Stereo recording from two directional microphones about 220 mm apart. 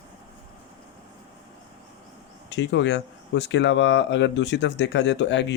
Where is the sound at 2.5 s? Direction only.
55° left (ahead or behind).